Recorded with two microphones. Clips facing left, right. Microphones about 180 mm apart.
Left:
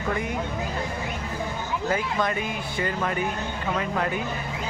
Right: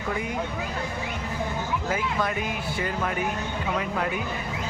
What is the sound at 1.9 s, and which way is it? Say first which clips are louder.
A man's voice: left 3 dB; 5° right (ahead or behind).